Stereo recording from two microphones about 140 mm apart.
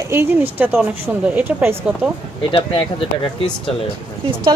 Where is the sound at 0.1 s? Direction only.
20° right (ahead or behind).